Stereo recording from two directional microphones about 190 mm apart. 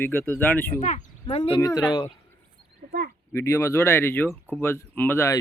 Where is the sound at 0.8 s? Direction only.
40° left (ahead or behind).